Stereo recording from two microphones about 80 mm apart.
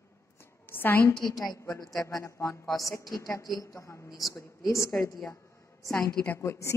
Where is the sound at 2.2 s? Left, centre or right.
Left.